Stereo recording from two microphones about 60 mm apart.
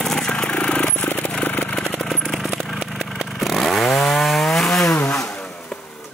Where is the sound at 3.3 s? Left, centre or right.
Centre.